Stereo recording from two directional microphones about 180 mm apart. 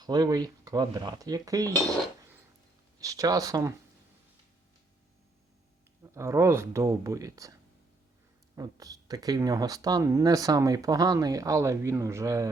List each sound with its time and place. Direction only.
0.0 s speech: 20° right (ahead or behind)
3.0 s speech: 20° right (ahead or behind)
6.0 s speech: 15° right (ahead or behind)